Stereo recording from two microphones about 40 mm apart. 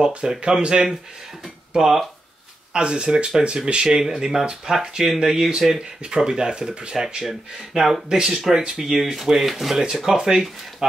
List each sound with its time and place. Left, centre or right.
0.2 s speech: right
1.7 s speech: centre
2.7 s speech: right
7.2 s speech: centre
9.8 s speech: centre